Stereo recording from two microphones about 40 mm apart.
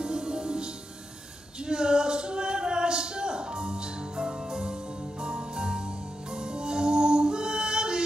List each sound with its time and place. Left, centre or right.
0.0 s music: centre
1.6 s a sound: centre
5.2 s music: centre